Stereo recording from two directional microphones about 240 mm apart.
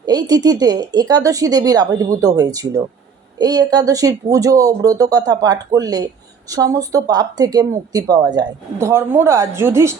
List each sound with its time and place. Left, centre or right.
0.0 s speech: centre